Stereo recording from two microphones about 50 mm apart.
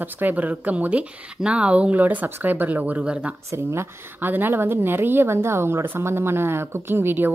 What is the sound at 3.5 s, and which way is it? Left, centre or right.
Speech, right.